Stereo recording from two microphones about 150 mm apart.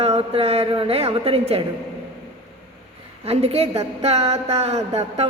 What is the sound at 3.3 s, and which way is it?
A woman's voice, 40° right (ahead or behind).